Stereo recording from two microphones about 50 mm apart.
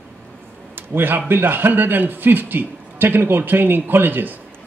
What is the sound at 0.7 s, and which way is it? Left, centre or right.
A man's voice, right.